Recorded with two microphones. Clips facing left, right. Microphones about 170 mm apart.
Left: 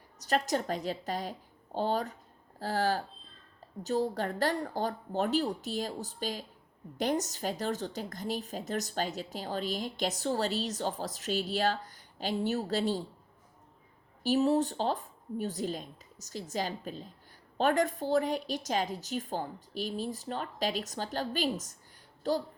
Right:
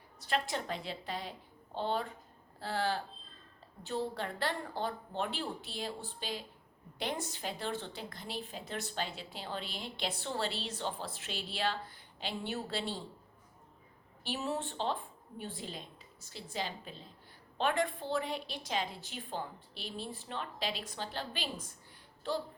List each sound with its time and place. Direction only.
0.2 s a woman's voice: 40° left (ahead or behind)
14.3 s a woman's voice: 35° left (ahead or behind)